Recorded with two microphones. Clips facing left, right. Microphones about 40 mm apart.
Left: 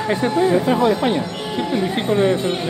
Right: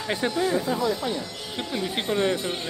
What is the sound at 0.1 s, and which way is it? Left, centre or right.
Speech, left.